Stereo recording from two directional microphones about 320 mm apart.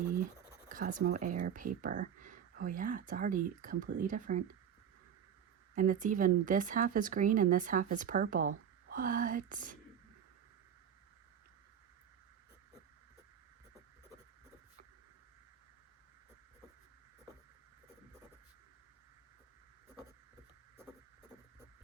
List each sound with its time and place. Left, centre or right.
0.7 s speech: right
5.7 s speech: right